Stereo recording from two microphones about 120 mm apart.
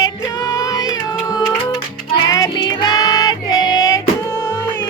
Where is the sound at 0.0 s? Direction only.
25° left (ahead or behind).